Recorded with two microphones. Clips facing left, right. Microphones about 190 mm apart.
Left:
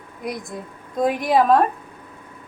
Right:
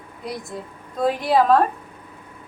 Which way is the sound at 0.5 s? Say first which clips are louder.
Left 3 dB; 10° left (ahead or behind).